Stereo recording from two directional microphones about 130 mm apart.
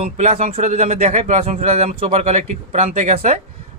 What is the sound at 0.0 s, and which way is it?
Speech, 60° right (ahead or behind).